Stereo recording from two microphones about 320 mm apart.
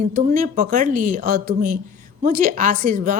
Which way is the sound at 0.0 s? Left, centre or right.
Right.